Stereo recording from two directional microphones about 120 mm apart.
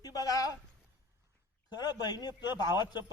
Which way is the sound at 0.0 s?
30° left (ahead or behind).